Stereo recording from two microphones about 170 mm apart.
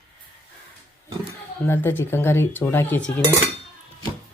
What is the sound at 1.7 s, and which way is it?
Speech, 15° left (ahead or behind).